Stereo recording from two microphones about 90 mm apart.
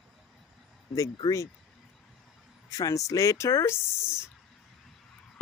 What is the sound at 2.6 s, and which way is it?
Speech, 40° left (ahead or behind).